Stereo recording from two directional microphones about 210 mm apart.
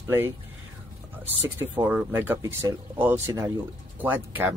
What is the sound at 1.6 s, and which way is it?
Speech, 10° right (ahead or behind).